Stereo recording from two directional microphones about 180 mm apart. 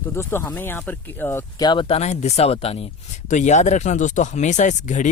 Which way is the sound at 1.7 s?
30° left (ahead or behind).